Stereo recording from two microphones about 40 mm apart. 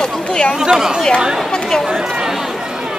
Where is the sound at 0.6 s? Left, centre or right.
Centre.